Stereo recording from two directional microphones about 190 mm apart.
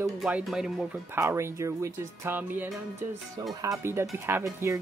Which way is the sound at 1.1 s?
15° right (ahead or behind).